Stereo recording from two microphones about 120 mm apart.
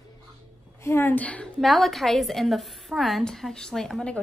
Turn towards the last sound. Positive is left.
turn(degrees=5)  # may be behind; listen again after turning